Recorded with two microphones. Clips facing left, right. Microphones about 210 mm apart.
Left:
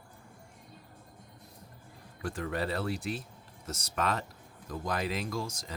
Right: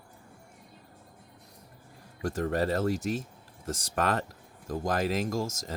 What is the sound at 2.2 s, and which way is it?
Speech, 40° right (ahead or behind).